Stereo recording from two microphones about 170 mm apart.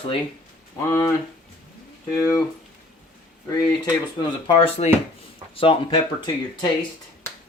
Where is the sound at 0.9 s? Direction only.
15° left (ahead or behind).